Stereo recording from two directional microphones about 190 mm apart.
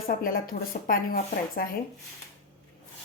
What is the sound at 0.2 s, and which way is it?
Speech, 50° left (ahead or behind).